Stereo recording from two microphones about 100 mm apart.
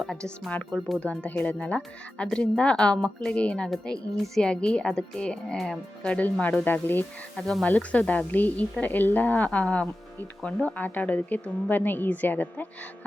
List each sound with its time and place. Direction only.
0.0 s speech: 5° left (ahead or behind)
7.3 s speech: 5° left (ahead or behind)